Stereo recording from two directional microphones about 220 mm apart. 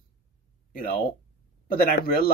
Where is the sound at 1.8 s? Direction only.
45° left (ahead or behind).